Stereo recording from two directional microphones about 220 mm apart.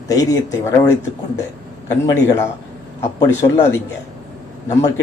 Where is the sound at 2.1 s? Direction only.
10° left (ahead or behind).